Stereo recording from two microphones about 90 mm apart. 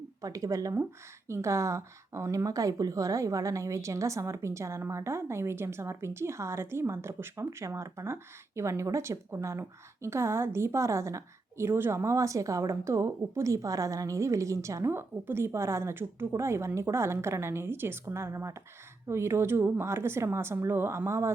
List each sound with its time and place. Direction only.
0.2 s speech: 40° right (ahead or behind)